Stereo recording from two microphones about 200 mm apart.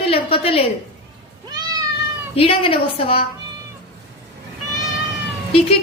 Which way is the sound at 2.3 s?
30° left (ahead or behind).